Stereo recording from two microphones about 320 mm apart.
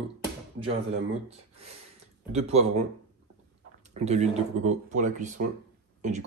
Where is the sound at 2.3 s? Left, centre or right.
Centre.